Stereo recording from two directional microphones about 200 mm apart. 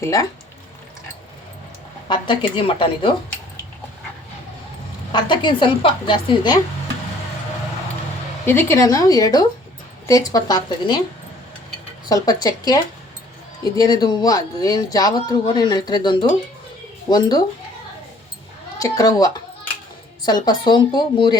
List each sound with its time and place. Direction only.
0.0 s a woman's voice: 15° left (ahead or behind)
2.0 s speech: 25° left (ahead or behind)
5.1 s speech: 25° left (ahead or behind)
8.4 s a woman's voice: 10° left (ahead or behind)
12.0 s speech: 20° left (ahead or behind)
18.8 s a woman's voice: 15° left (ahead or behind)